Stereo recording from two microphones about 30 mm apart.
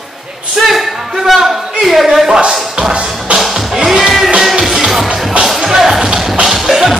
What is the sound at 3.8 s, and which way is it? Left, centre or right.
Music, centre.